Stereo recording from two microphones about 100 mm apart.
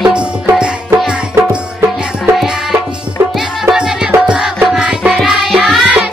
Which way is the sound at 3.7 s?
10° right (ahead or behind).